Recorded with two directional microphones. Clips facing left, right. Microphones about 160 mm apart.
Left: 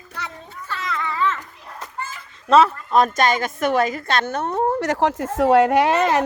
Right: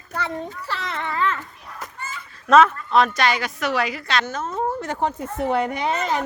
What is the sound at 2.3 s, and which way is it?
Honk, 30° left (ahead or behind).